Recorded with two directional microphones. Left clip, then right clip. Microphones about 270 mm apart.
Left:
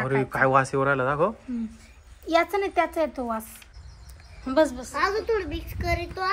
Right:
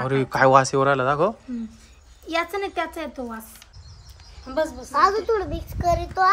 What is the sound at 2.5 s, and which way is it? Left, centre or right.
Speech, centre.